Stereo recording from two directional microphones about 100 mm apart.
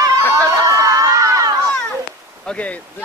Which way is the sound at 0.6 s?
35° right (ahead or behind).